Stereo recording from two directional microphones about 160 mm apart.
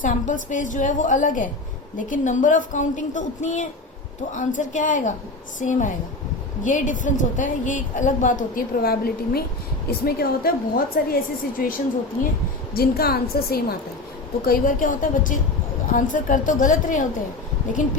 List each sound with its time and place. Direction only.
0.0 s a woman's voice: 55° left (ahead or behind)
12.7 s a woman's voice: 75° left (ahead or behind)
14.4 s a woman's voice: 60° left (ahead or behind)